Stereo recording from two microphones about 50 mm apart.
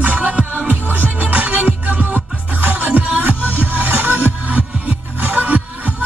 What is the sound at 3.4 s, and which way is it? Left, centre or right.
Music, left.